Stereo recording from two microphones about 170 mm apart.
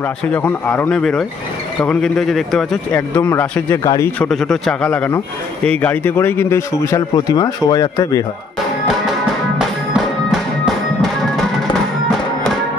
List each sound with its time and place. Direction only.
0.2 s a man's voice: 10° left (ahead or behind)
4.2 s a man's voice: centre (ahead or behind); by 8.2 s 20° left (ahead or behind)